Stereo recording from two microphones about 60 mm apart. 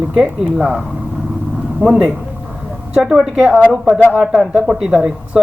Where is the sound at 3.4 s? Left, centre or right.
Right.